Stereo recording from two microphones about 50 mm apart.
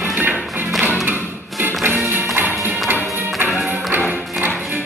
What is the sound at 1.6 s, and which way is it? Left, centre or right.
Music, right.